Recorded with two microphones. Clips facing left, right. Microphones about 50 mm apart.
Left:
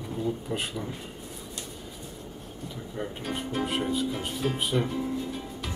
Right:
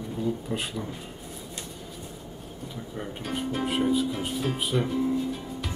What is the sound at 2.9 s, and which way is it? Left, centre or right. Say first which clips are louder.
Speech: even; centre.